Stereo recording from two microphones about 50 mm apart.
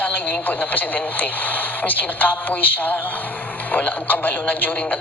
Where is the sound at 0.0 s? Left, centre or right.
Left.